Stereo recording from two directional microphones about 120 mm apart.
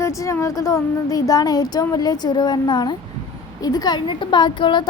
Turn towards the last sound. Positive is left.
turn(degrees=40)  # may be behind; listen again after turning